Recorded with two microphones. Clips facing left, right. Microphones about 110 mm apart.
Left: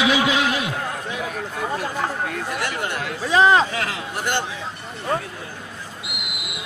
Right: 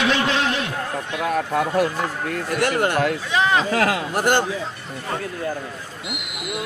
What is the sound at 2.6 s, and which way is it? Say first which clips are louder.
Speech: right 11 dB; 50° right (ahead or behind).